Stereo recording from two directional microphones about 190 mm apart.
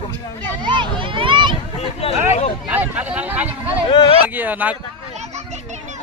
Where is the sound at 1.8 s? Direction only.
30° left (ahead or behind).